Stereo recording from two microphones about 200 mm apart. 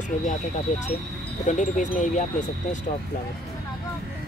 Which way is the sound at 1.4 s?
40° left (ahead or behind).